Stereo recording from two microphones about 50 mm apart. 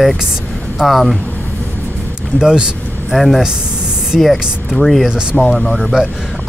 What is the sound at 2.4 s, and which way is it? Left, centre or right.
Speech, centre.